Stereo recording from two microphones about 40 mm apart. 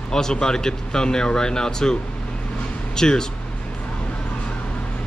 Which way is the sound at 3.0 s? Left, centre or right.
Centre.